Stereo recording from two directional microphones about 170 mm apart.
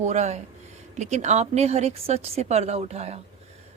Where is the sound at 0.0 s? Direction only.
45° right (ahead or behind).